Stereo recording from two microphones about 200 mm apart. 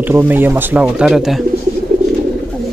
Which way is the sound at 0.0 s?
10° right (ahead or behind).